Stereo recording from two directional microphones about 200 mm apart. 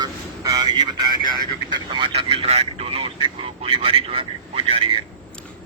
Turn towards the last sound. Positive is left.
turn(degrees=-30)  # may be behind; listen again after turning